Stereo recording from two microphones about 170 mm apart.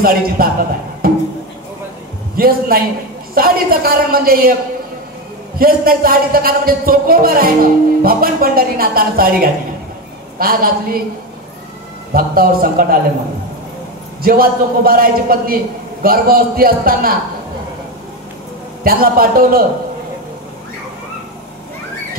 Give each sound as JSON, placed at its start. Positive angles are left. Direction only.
{"t": 0.0, "sound": "a man's voice", "side_deg": -60}
{"t": 1.0, "sound": "music", "side_deg": -60}
{"t": 2.3, "sound": "a man's voice", "side_deg": -60}
{"t": 5.6, "sound": "a man's voice", "side_deg": -60}
{"t": 12.1, "sound": "a man's voice", "side_deg": -60}
{"t": 14.2, "sound": "a man's voice", "side_deg": -60}
{"t": 18.9, "sound": "a man's voice", "side_deg": -60}